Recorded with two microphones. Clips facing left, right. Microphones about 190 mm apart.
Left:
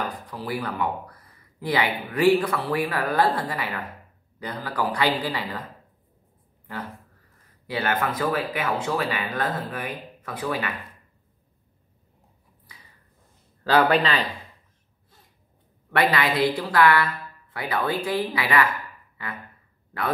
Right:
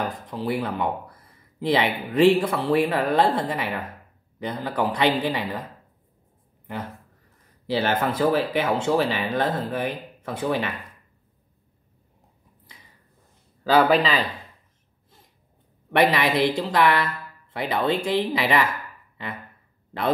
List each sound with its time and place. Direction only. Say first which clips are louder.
0.3 s speech: right 4 dB; 25° right (ahead or behind)
7.6 s speech: right 3 dB; 25° right (ahead or behind)
13.7 s speech: right 1 dB; 5° right (ahead or behind)
15.9 s speech: right 3 dB; 20° right (ahead or behind)